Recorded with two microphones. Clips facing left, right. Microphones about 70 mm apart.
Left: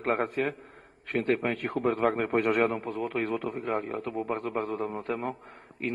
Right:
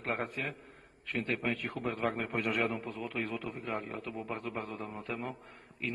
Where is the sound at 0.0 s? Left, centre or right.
Left.